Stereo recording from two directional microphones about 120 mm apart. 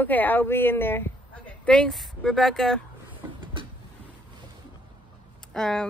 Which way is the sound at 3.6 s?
45° right (ahead or behind).